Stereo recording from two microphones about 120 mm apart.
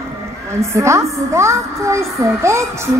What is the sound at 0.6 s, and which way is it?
A child's voice, 25° right (ahead or behind).